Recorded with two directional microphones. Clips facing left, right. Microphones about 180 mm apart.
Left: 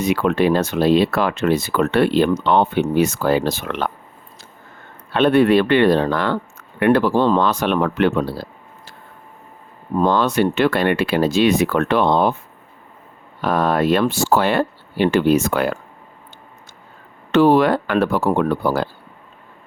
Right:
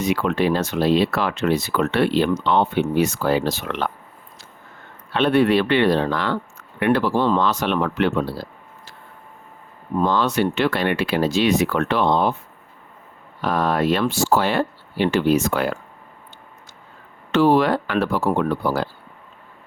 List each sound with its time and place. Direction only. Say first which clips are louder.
0.0 s speech: left 3 dB; 55° left (ahead or behind)
5.1 s speech: left 3 dB; 50° left (ahead or behind)
10.1 s speech: left 3 dB; 50° left (ahead or behind)
13.4 s speech: left 3 dB; 50° left (ahead or behind)
17.3 s speech: left 3 dB; 55° left (ahead or behind)